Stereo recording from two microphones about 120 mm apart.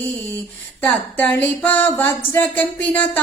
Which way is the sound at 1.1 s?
15° left (ahead or behind).